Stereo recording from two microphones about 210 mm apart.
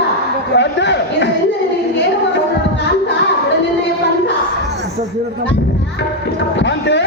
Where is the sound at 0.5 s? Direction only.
55° left (ahead or behind).